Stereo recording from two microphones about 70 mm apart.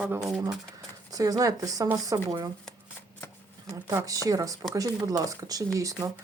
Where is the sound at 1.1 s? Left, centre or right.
Right.